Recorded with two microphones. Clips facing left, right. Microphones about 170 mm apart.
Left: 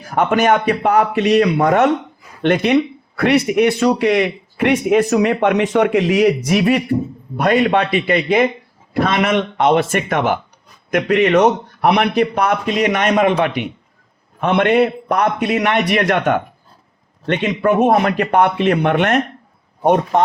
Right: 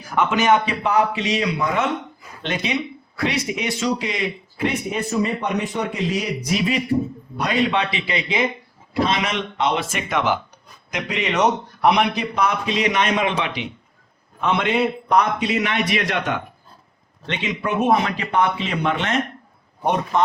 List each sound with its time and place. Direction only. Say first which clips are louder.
0.2 s a man's voice: left 3 dB; 55° left (ahead or behind)